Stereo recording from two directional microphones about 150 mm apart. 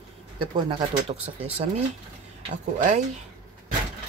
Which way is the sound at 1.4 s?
40° right (ahead or behind).